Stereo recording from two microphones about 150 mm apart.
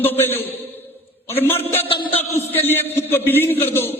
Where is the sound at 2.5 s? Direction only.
15° left (ahead or behind).